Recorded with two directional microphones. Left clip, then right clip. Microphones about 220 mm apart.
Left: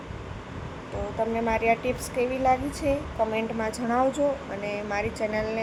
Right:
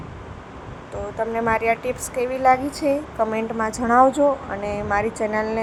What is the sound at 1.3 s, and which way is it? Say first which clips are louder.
A woman's voice: right 5 dB; 10° right (ahead or behind).